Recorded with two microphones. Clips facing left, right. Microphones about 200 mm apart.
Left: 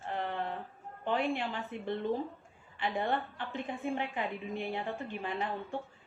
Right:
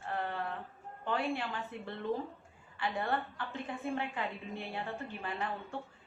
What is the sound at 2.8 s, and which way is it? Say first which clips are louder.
A woman's voice: left 2 dB; 15° left (ahead or behind).